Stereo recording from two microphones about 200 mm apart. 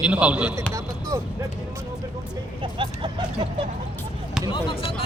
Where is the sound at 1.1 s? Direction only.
15° right (ahead or behind).